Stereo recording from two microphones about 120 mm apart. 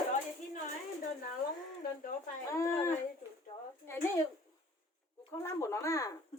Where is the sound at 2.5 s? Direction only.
25° left (ahead or behind).